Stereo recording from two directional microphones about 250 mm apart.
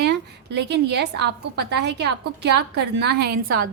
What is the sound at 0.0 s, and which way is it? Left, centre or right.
A woman's voice, right.